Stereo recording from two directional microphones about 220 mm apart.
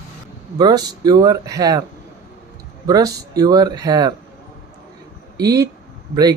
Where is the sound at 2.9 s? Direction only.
15° right (ahead or behind).